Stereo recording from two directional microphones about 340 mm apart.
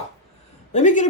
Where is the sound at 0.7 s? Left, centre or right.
Left.